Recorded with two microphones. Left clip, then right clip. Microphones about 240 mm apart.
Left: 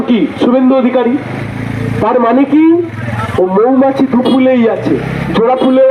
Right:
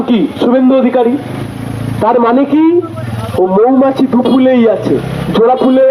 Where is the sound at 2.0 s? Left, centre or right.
Right.